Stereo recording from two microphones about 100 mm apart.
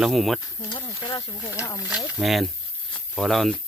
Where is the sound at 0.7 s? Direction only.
50° left (ahead or behind).